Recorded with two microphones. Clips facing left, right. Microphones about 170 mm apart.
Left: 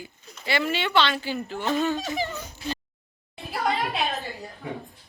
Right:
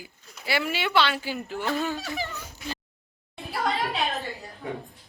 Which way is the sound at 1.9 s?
20° left (ahead or behind).